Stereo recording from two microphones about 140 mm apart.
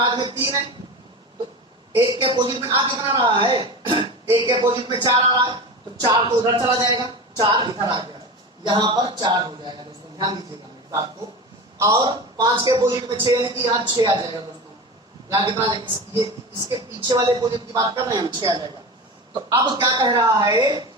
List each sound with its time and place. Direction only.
0.0 s a sound: 35° right (ahead or behind)
2.1 s a woman's voice: 35° right (ahead or behind)
11.8 s a woman's voice: 25° right (ahead or behind)